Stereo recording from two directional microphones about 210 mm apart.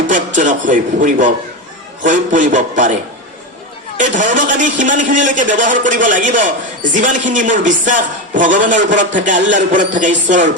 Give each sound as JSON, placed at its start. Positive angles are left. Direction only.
{"t": 0.3, "sound": "a man's voice", "side_deg": -35}